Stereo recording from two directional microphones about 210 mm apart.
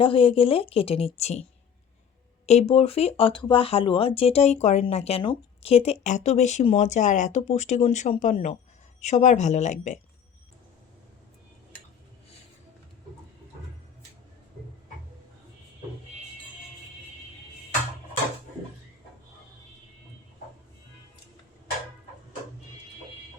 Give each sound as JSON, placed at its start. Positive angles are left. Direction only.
{"t": 0.0, "sound": "a woman's voice", "side_deg": 25}
{"t": 2.5, "sound": "speech", "side_deg": 30}